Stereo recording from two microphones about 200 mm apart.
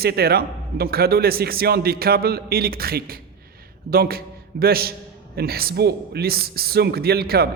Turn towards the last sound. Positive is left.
turn(degrees=-50)  # may be behind; listen again after turning